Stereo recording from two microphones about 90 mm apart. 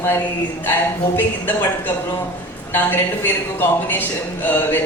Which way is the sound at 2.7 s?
25° left (ahead or behind).